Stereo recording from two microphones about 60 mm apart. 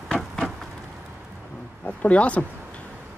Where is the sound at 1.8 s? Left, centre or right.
Left.